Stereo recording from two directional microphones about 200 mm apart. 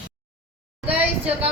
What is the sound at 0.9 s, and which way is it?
Speech, 5° right (ahead or behind).